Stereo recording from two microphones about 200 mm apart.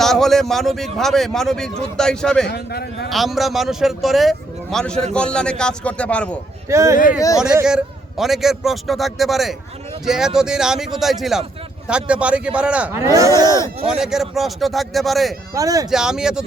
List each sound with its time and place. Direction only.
0.0 s speech: centre (ahead or behind)
2.5 s a man's voice: 55° left (ahead or behind)
3.1 s speech: centre (ahead or behind)
6.7 s speech: 15° right (ahead or behind)
7.6 s speech: 5° right (ahead or behind)
13.8 s speech: 5° right (ahead or behind)
15.5 s speech: 15° right (ahead or behind)
15.9 s speech: 5° right (ahead or behind)